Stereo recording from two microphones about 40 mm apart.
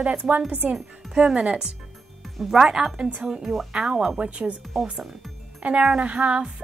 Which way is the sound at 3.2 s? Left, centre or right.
Centre.